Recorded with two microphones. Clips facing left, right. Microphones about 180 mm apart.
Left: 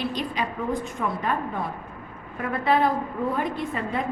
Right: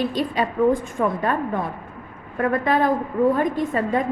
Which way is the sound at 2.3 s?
50° right (ahead or behind).